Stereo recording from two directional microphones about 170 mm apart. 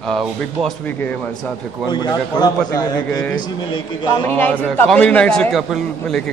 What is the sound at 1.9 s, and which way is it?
A man's voice, 25° left (ahead or behind).